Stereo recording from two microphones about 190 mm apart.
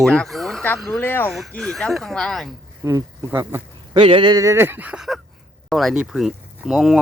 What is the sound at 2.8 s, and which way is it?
Speech, 15° right (ahead or behind).